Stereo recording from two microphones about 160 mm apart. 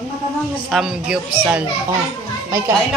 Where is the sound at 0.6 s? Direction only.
Centre (ahead or behind).